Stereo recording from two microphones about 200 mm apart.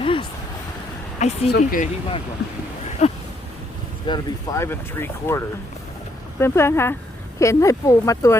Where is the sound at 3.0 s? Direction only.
35° left (ahead or behind).